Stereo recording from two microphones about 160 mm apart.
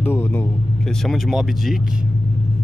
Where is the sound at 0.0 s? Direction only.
15° left (ahead or behind).